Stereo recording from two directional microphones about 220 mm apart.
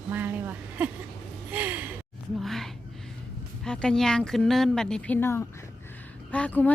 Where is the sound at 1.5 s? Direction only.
10° right (ahead or behind).